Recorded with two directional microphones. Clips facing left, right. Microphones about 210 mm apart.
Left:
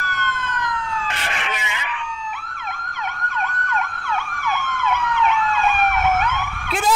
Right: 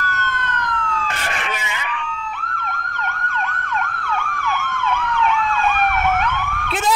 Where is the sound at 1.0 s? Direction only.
45° right (ahead or behind).